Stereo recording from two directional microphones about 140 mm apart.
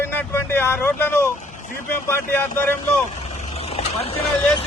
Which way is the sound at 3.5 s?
45° left (ahead or behind).